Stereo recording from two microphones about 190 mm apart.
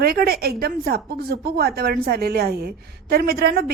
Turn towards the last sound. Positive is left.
turn(degrees=-55)  # may be behind; listen again after turning